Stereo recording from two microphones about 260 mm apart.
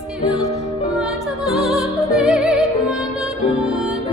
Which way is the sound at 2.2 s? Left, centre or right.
Centre.